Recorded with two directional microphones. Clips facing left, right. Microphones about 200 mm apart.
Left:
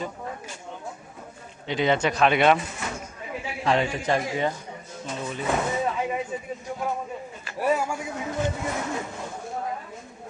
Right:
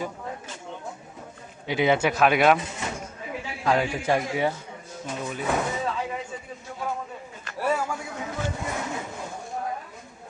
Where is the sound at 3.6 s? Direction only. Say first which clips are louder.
Even; 5° right (ahead or behind).